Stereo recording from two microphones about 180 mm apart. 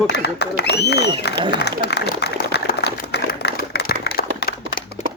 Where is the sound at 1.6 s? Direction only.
65° left (ahead or behind).